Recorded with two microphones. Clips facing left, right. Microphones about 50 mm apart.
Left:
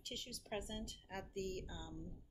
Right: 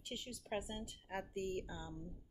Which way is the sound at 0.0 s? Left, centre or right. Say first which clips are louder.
Right 2 dB; centre.